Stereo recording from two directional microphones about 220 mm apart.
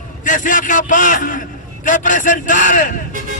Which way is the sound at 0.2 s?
35° left (ahead or behind).